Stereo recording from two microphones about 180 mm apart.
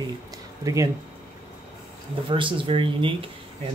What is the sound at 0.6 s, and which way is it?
Speech, 15° right (ahead or behind).